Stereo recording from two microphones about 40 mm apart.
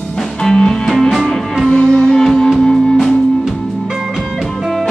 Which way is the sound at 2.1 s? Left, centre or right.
Centre.